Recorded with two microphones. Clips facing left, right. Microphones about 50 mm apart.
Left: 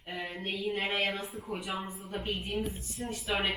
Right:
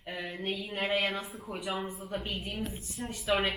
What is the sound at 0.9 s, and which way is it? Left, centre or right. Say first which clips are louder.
Speech: right 4 dB; centre.